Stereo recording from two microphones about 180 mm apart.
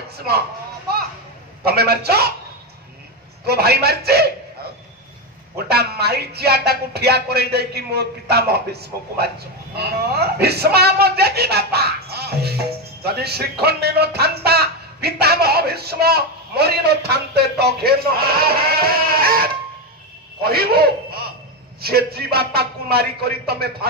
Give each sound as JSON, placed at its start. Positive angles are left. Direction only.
{"t": 1.7, "sound": "a man's voice", "side_deg": -60}
{"t": 3.4, "sound": "a man's voice", "side_deg": -60}
{"t": 5.7, "sound": "a man's voice", "side_deg": -60}
{"t": 9.8, "sound": "a man's voice", "side_deg": -65}